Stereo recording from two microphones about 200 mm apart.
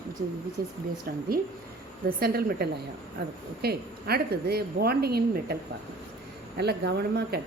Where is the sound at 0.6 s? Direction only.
45° right (ahead or behind).